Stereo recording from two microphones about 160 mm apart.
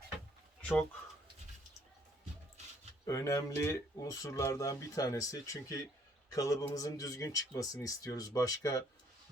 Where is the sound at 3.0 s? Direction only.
20° left (ahead or behind).